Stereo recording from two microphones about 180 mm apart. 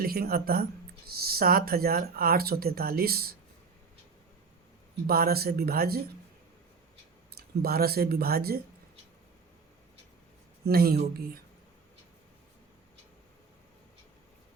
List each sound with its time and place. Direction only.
0.0 s speech: 55° right (ahead or behind)
5.0 s speech: 55° right (ahead or behind)
7.3 s speech: 55° right (ahead or behind)
10.7 s speech: 60° right (ahead or behind)